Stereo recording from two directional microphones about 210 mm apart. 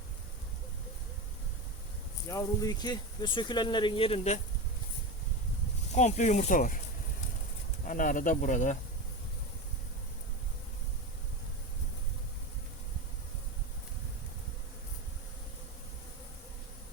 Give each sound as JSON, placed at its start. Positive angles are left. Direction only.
{"t": 2.3, "sound": "speech", "side_deg": 15}
{"t": 5.9, "sound": "speech", "side_deg": 35}
{"t": 7.9, "sound": "speech", "side_deg": 40}